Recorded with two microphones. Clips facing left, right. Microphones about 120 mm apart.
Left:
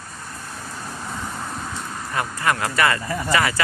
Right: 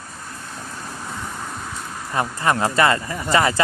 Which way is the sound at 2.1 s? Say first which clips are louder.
Right 3 dB; 25° right (ahead or behind).